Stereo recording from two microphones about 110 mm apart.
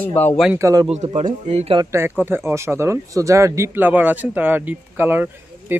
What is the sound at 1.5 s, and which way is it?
Speech, 85° right.